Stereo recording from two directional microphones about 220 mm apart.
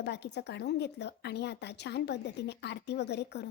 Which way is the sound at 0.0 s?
50° left (ahead or behind).